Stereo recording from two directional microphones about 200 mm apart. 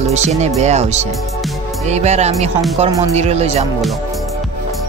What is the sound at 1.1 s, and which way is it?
Music, centre (ahead or behind).